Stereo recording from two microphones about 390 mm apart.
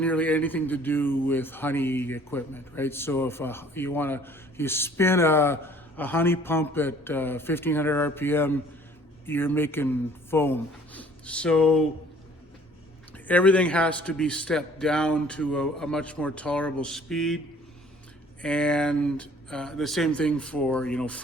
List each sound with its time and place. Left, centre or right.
0.0 s speech: centre
13.2 s speech: centre
18.4 s speech: centre